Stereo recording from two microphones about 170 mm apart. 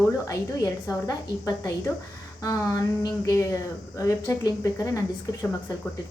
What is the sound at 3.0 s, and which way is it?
A woman's voice, 20° left (ahead or behind).